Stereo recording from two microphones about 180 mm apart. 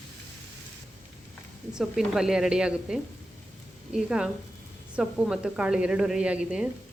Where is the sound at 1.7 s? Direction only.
Centre (ahead or behind).